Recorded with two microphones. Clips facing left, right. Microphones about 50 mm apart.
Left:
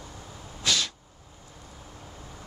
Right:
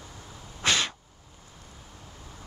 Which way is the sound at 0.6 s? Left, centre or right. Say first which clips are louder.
Right 2 dB; right.